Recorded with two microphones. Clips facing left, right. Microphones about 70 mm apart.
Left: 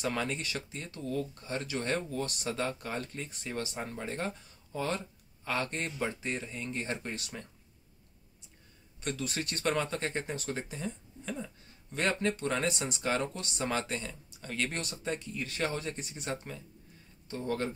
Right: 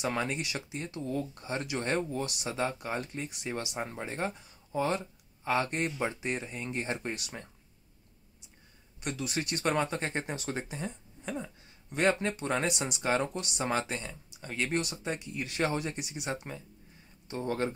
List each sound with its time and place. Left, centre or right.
0.0 s speech: centre
2.2 s speech: centre
9.0 s speech: centre
13.0 s speech: right
17.4 s speech: right